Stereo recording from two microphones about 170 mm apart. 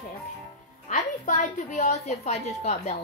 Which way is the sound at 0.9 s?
50° left (ahead or behind).